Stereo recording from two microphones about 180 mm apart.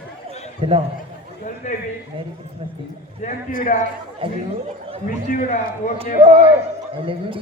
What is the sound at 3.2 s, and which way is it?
Speech, 40° left (ahead or behind).